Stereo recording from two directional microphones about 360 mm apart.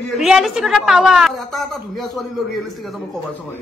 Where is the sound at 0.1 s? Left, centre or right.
Centre.